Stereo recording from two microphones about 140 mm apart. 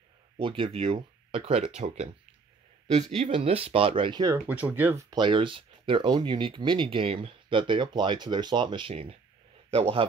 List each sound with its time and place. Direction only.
0.4 s speech: 40° right (ahead or behind)
3.2 s speech: 45° right (ahead or behind); by 4.4 s 30° right (ahead or behind)
4.5 s speech: 10° right (ahead or behind)
5.1 s speech: 35° right (ahead or behind)